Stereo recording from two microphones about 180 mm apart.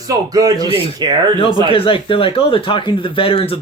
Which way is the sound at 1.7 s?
30° left (ahead or behind).